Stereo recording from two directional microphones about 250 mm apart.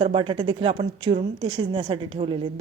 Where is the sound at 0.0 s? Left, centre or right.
Right.